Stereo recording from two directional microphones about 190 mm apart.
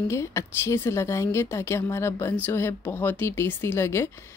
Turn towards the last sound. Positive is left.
turn(degrees=15)  # may be behind; listen again after turning